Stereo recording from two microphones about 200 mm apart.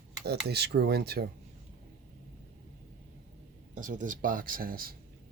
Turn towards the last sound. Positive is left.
turn(degrees=-45)  # may be behind; listen again after turning